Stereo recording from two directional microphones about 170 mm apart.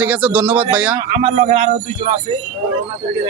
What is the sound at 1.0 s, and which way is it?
Speech, 30° right (ahead or behind).